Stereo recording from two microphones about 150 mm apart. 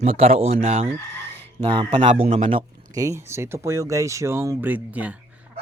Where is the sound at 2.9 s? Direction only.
20° right (ahead or behind).